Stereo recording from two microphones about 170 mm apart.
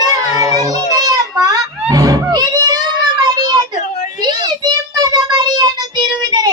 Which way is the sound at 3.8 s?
45° left (ahead or behind).